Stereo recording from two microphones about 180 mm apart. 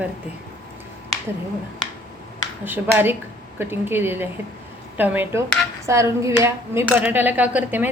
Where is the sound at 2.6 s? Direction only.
10° right (ahead or behind).